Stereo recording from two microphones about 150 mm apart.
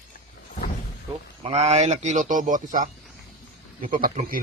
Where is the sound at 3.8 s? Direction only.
70° right (ahead or behind).